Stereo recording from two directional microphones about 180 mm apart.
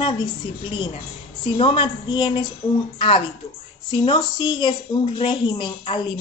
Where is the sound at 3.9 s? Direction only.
25° left (ahead or behind).